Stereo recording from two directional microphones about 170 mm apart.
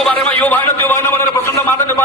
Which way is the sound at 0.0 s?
10° left (ahead or behind).